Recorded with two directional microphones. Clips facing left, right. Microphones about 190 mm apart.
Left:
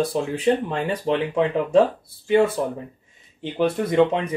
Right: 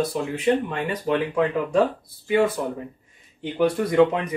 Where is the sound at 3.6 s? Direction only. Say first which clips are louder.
Right 1 dB; 25° left (ahead or behind).